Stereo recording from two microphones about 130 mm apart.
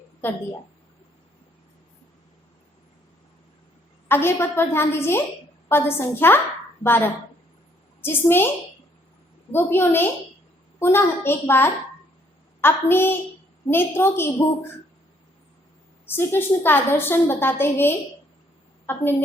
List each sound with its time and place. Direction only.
4.1 s a woman's voice: 20° left (ahead or behind)
9.5 s a woman's voice: 15° left (ahead or behind)
16.0 s a woman's voice: 15° left (ahead or behind)